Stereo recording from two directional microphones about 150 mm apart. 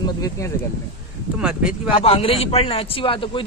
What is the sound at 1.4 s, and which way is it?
Speech, 5° right (ahead or behind).